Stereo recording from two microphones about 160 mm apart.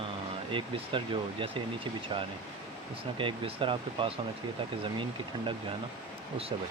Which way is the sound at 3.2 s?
30° right (ahead or behind).